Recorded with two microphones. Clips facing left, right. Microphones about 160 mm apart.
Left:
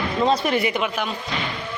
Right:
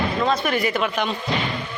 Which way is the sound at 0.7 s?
10° left (ahead or behind).